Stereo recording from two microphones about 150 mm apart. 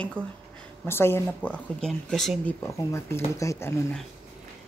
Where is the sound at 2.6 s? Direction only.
15° left (ahead or behind).